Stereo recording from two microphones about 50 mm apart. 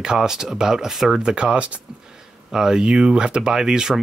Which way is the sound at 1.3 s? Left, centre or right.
Right.